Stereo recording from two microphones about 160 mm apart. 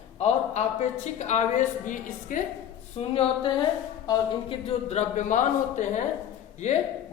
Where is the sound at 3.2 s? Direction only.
30° left (ahead or behind).